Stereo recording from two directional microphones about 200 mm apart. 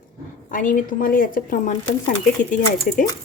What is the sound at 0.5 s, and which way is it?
A woman's voice, 40° left (ahead or behind).